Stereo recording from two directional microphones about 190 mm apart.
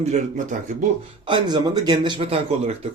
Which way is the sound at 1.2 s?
25° right (ahead or behind).